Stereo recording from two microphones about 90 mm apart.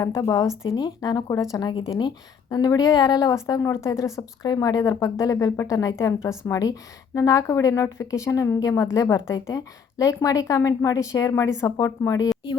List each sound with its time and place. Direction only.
0.0 s a woman's voice: 35° left (ahead or behind)
2.0 s a woman's voice: 55° left (ahead or behind)